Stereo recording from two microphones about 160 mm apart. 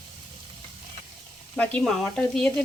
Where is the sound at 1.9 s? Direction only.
5° left (ahead or behind).